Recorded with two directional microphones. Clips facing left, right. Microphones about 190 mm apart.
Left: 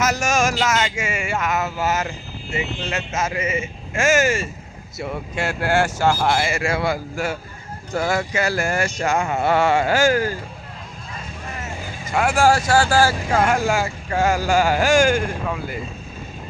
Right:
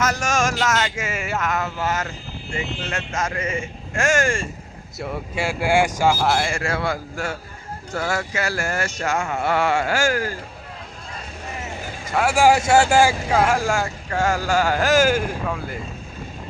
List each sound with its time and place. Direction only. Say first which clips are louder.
0.0 s speech: left 2 dB; 10° left (ahead or behind)
12.1 s speech: right 1 dB; 5° right (ahead or behind)
13.2 s speech: even; centre (ahead or behind)
14.1 s speech: left 2 dB; 15° left (ahead or behind)
14.8 s speech: left 1 dB; 5° right (ahead or behind)